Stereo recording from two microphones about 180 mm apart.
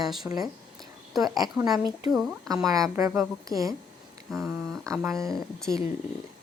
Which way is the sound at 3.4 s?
20° right (ahead or behind).